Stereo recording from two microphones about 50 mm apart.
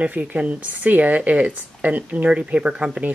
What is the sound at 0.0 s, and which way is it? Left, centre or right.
Speech, right.